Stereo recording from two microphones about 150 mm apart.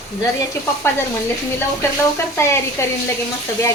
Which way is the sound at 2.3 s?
20° left (ahead or behind).